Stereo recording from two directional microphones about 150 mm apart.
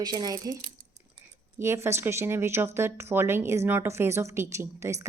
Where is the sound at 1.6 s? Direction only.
20° right (ahead or behind).